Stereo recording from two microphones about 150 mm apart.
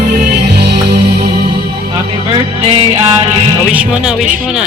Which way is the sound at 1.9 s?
35° right (ahead or behind).